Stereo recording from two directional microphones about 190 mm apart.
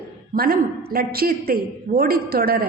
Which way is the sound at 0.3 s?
50° right (ahead or behind).